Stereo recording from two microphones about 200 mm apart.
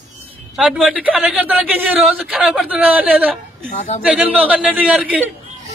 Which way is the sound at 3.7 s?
35° left (ahead or behind).